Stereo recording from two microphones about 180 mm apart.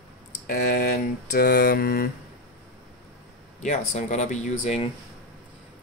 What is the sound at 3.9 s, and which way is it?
Speech, 40° left (ahead or behind).